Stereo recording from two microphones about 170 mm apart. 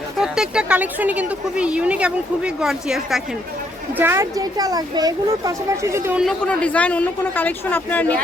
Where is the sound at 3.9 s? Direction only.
15° right (ahead or behind).